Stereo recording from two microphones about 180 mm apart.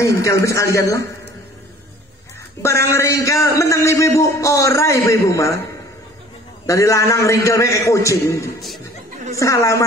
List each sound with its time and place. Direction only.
0.0 s a man's voice: 15° left (ahead or behind)
2.6 s a man's voice: 15° left (ahead or behind)
6.6 s a man's voice: 15° left (ahead or behind)
8.5 s chatter: centre (ahead or behind)
9.4 s a man's voice: 15° left (ahead or behind)